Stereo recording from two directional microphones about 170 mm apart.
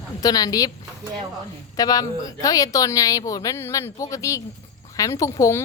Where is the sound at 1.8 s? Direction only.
20° left (ahead or behind).